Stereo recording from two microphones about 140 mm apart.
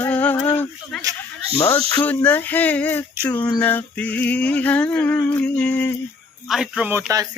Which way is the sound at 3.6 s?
10° left (ahead or behind).